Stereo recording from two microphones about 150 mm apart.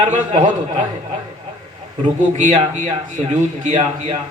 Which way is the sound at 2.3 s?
50° right (ahead or behind).